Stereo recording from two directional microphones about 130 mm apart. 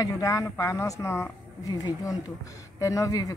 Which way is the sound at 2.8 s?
25° left (ahead or behind).